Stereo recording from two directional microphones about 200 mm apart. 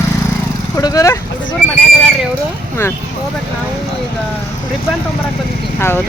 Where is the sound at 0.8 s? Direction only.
20° left (ahead or behind).